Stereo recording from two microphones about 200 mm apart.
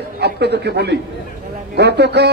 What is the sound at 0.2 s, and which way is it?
A man's voice, 55° right (ahead or behind).